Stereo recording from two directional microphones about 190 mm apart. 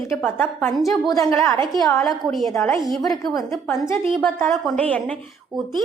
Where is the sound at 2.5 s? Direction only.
15° left (ahead or behind).